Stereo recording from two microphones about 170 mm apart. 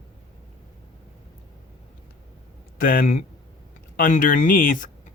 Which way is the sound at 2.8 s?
55° left (ahead or behind).